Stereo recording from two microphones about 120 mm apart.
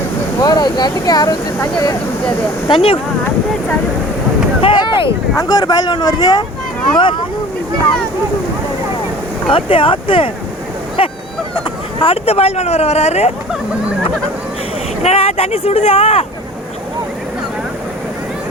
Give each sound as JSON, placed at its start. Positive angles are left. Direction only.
{"t": 0.3, "sound": "speech", "side_deg": 35}
{"t": 2.6, "sound": "speech", "side_deg": 50}
{"t": 4.6, "sound": "a sound", "side_deg": 40}
{"t": 5.4, "sound": "speech", "side_deg": 35}
{"t": 9.5, "sound": "speech", "side_deg": 50}
{"t": 11.9, "sound": "speech", "side_deg": 50}
{"t": 15.0, "sound": "speech", "side_deg": 60}